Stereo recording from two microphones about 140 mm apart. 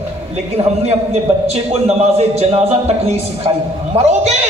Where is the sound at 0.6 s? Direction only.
40° right (ahead or behind).